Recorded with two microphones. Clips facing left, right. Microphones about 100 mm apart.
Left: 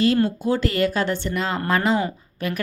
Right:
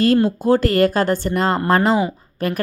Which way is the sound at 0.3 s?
45° right (ahead or behind).